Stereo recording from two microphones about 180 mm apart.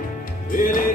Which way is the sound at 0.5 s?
50° left (ahead or behind).